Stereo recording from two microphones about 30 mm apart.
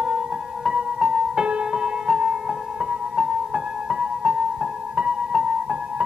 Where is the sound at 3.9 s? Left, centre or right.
Right.